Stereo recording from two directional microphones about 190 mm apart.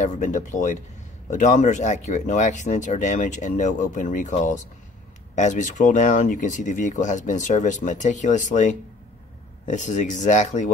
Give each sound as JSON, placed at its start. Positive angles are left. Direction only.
{"t": 0.0, "sound": "speech", "side_deg": 40}